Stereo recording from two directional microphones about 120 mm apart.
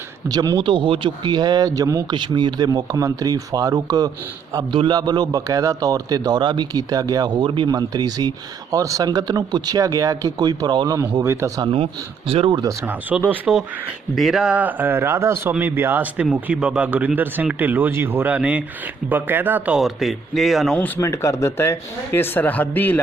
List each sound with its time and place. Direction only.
0.3 s speech: 35° right (ahead or behind)
11.2 s speech: 25° right (ahead or behind)
11.6 s speech: 50° right (ahead or behind)
12.8 s speech: 15° right (ahead or behind)
14.2 s speech: centre (ahead or behind)
19.8 s a man's voice: centre (ahead or behind)
20.7 s speech: 15° left (ahead or behind)
21.1 s speech: 25° left (ahead or behind)